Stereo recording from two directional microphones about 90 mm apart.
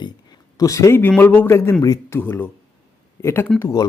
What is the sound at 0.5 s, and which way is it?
Speech, 40° left (ahead or behind).